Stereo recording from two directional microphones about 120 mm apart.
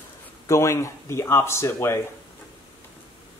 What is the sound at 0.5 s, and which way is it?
Speech, 25° left (ahead or behind).